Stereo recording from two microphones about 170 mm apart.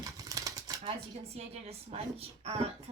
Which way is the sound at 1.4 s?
35° right (ahead or behind).